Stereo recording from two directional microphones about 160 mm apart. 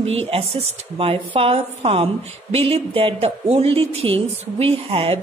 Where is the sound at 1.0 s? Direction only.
35° right (ahead or behind).